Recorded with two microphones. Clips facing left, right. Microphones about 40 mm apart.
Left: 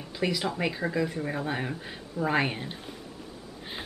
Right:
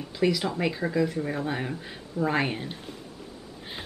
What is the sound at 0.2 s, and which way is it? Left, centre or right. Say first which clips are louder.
Speech: right 3 dB; centre.